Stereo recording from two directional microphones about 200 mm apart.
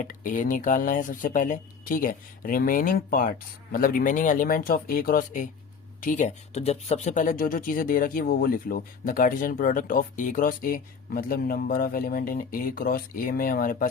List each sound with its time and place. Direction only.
0.0 s speech: 40° left (ahead or behind)